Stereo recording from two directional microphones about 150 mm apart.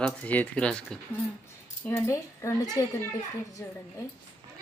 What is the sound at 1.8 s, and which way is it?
Speech, 20° left (ahead or behind).